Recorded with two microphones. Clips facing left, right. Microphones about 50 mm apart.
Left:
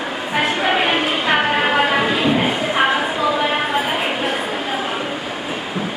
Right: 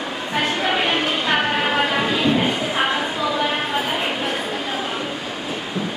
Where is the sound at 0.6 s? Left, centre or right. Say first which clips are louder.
Left 3 dB; centre.